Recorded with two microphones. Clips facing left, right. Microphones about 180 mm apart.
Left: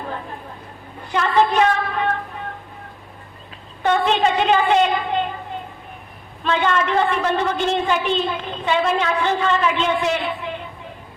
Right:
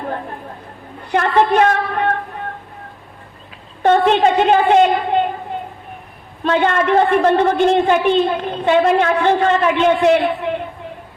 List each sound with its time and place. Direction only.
1.1 s a woman's voice: 55° right (ahead or behind)
3.8 s a sound: 50° right (ahead or behind)
6.4 s a woman's voice: 50° right (ahead or behind)